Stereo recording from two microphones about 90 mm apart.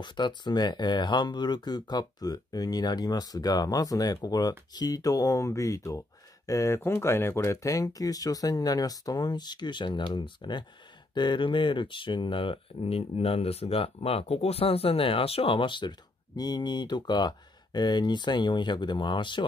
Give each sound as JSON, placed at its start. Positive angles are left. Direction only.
{"t": 0.0, "sound": "speech", "side_deg": 60}